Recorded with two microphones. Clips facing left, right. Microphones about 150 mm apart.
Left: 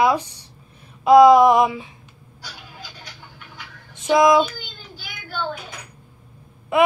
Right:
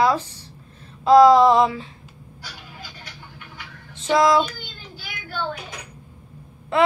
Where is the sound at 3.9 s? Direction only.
15° left (ahead or behind).